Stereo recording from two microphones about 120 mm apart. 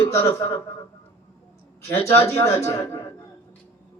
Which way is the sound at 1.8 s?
25° left (ahead or behind).